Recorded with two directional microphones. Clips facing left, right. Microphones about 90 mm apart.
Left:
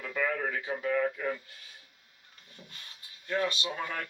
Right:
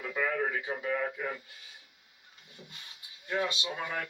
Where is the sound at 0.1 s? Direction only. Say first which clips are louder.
Even; 20° right (ahead or behind).